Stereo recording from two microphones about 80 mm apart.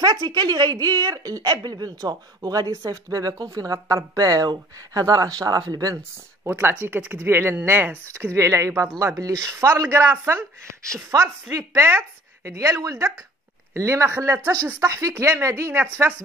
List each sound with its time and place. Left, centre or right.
0.2 s speech: right
6.4 s speech: right
6.7 s a woman's voice: centre
11.1 s speech: right
11.5 s a woman's voice: right
16.1 s speech: right